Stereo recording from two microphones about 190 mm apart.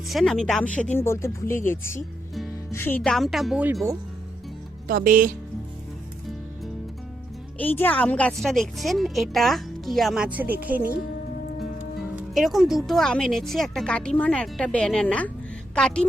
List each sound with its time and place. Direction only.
0.1 s speech: centre (ahead or behind)
4.9 s speech: 45° right (ahead or behind)
7.6 s speech: 10° left (ahead or behind); by 10.8 s 10° right (ahead or behind)
10.8 s speech: 50° right (ahead or behind)
11.9 s speech: centre (ahead or behind)